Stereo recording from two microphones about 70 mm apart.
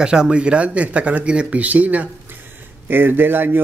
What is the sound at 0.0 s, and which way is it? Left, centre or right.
Speech, centre.